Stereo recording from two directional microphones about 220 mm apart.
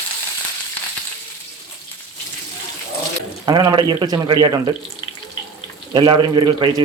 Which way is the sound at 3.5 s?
20° right (ahead or behind).